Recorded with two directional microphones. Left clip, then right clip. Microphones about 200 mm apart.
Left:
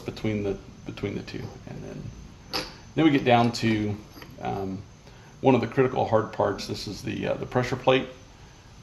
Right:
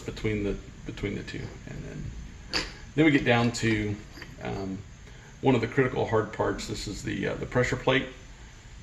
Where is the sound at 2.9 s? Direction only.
45° left (ahead or behind).